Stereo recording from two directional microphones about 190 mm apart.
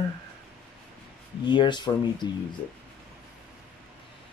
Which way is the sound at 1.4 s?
25° left (ahead or behind).